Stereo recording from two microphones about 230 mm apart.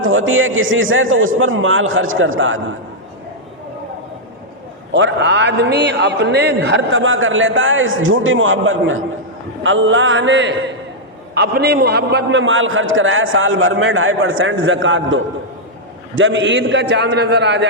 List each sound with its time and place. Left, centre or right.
0.0 s a man's voice: right
4.9 s a man's voice: right